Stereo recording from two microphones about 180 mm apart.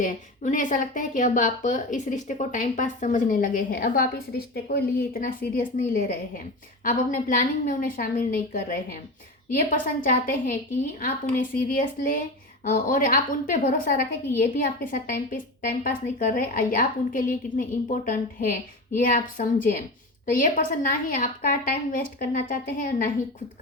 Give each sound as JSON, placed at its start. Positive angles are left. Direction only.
{"t": 0.0, "sound": "speech", "side_deg": 45}